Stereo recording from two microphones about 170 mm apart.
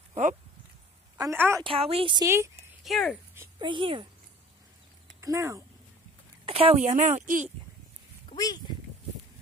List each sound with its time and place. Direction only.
0.1 s a sound: 45° right (ahead or behind)
1.1 s a woman's voice: 15° right (ahead or behind)
1.6 s speech: 35° right (ahead or behind)
2.2 s speech: 15° right (ahead or behind)
2.8 s speech: centre (ahead or behind)
3.5 s speech: 30° right (ahead or behind)
5.2 s speech: 20° right (ahead or behind)
6.4 s speech: 35° right (ahead or behind)
8.4 s speech: 20° left (ahead or behind)